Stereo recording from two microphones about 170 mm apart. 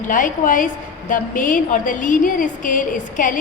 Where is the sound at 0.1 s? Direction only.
50° left (ahead or behind).